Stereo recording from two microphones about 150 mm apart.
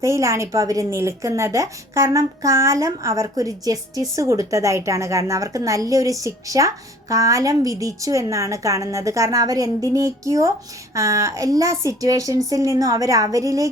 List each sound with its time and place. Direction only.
0.0 s a woman's voice: 20° right (ahead or behind)